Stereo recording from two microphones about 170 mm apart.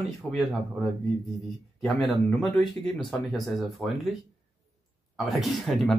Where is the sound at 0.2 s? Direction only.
5° left (ahead or behind).